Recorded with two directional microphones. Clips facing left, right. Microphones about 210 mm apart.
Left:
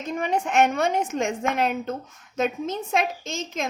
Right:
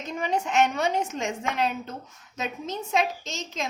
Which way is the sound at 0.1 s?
55° left (ahead or behind).